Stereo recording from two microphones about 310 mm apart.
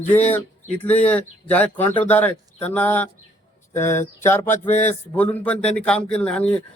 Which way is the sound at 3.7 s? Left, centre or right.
Centre.